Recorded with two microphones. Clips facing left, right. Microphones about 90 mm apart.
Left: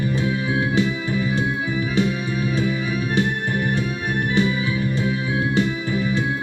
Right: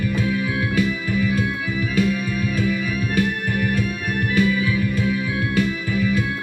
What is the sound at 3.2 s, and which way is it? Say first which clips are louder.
Music: right 1 dB; 25° left (ahead or behind).